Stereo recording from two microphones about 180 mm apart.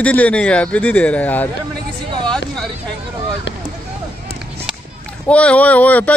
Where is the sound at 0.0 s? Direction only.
10° left (ahead or behind).